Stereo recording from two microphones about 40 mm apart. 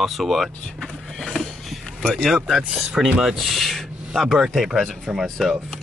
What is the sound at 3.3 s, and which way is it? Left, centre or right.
Speech, centre.